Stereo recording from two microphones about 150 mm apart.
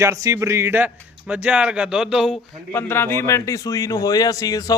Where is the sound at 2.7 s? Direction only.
15° left (ahead or behind).